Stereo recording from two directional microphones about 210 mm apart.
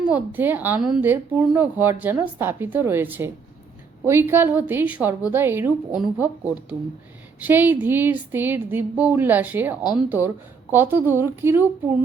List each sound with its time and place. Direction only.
0.0 s speech: 5° right (ahead or behind)